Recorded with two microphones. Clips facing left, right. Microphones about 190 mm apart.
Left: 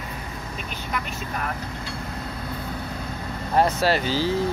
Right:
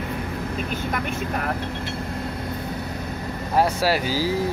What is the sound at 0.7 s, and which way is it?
Speech, 50° right (ahead or behind).